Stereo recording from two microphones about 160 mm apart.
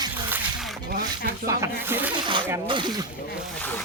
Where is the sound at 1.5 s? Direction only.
15° right (ahead or behind).